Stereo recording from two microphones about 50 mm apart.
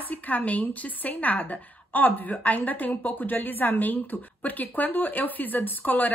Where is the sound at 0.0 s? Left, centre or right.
Left.